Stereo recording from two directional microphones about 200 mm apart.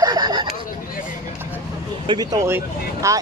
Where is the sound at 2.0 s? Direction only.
20° right (ahead or behind).